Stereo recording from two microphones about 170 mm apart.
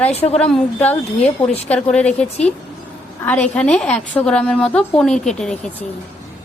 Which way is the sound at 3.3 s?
10° left (ahead or behind).